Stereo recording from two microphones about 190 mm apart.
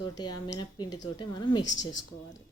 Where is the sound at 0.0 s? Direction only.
20° left (ahead or behind).